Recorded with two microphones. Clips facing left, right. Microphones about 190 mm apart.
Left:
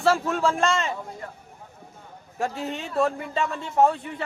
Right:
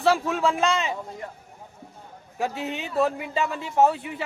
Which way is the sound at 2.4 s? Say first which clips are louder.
Even; centre (ahead or behind).